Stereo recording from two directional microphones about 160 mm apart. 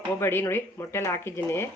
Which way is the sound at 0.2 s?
15° left (ahead or behind).